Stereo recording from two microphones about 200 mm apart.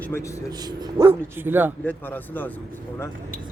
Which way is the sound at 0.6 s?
20° right (ahead or behind).